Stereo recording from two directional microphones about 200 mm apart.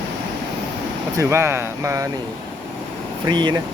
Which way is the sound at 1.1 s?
15° right (ahead or behind).